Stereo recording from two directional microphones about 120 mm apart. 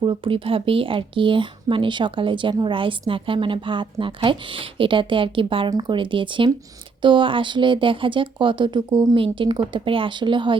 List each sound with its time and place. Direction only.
0.0 s speech: 45° right (ahead or behind)